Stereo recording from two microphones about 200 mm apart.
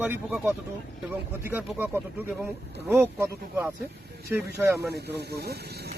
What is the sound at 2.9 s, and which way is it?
Speech, 10° right (ahead or behind).